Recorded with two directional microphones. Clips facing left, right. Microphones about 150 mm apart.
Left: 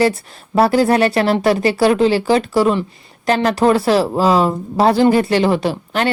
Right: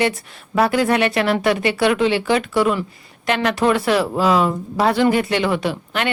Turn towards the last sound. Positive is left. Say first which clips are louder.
# left 4 dB
turn(degrees=35)  # may be behind; listen again after turning